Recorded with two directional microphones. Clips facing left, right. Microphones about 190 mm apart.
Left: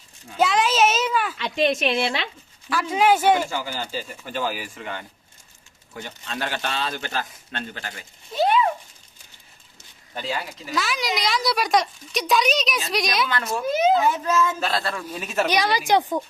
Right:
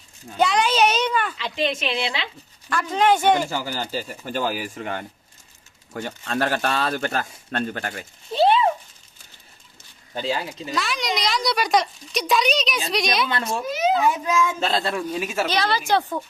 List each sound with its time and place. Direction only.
0.3 s a child's voice: centre (ahead or behind)
1.4 s a woman's voice: 50° left (ahead or behind)
2.6 s a woman's voice: 5° left (ahead or behind)
3.4 s speech: 40° right (ahead or behind)
8.3 s a sound: 30° right (ahead or behind)
10.2 s speech: 30° right (ahead or behind)
10.7 s a woman's voice: centre (ahead or behind)
13.2 s speech: 25° right (ahead or behind)
14.1 s a man's voice: 10° right (ahead or behind)
14.6 s a man's voice: 25° right (ahead or behind)
15.4 s a woman's voice: 15° left (ahead or behind)